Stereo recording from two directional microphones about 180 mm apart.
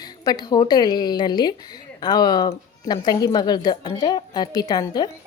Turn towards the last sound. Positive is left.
turn(degrees=25)  # may be behind; listen again after turning